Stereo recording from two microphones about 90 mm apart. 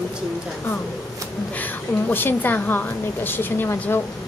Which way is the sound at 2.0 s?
20° left (ahead or behind).